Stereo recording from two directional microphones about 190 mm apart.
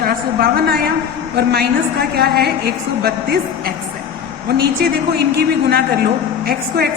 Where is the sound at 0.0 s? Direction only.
50° right (ahead or behind).